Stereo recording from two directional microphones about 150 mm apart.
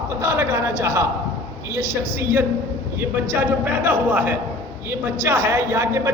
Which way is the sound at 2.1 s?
15° right (ahead or behind).